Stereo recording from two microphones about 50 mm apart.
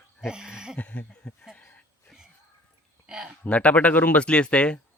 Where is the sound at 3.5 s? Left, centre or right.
Left.